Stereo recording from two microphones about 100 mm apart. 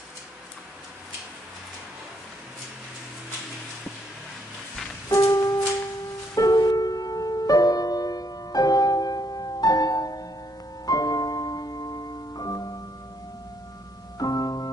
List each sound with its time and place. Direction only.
5.1 s music: 35° left (ahead or behind)
14.1 s music: 40° left (ahead or behind)